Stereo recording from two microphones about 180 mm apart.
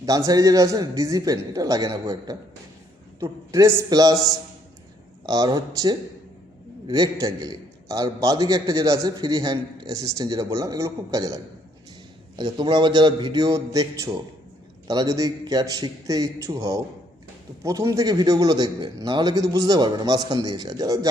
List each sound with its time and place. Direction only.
0.0 s a man's voice: 20° right (ahead or behind)
5.2 s a man's voice: 20° right (ahead or behind)
12.4 s a man's voice: 25° right (ahead or behind)